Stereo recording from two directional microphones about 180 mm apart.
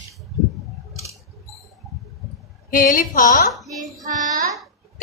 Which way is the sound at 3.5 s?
Centre (ahead or behind).